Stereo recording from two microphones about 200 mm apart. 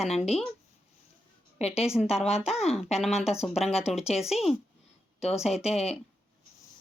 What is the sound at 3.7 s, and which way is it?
Speech, 30° left (ahead or behind).